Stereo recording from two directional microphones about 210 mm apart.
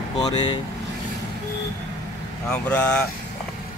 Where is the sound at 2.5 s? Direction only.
5° left (ahead or behind).